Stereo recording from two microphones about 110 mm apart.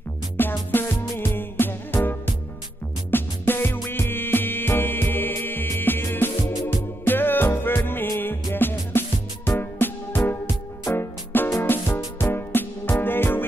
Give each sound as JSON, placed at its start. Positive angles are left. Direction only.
{"t": 0.4, "sound": "music", "side_deg": 20}
{"t": 3.1, "sound": "music", "side_deg": 20}